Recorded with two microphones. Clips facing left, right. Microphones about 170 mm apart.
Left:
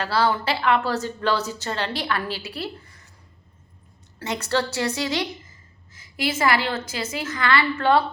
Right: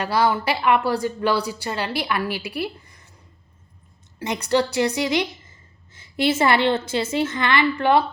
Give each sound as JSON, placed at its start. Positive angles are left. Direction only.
{"t": 0.0, "sound": "a woman's voice", "side_deg": -15}
{"t": 4.2, "sound": "a woman's voice", "side_deg": -15}
{"t": 5.5, "sound": "a woman's voice", "side_deg": -30}